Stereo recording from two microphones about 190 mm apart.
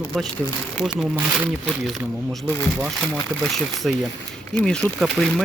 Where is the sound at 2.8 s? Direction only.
5° right (ahead or behind).